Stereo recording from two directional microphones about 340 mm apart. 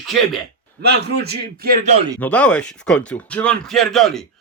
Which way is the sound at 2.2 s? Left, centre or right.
Centre.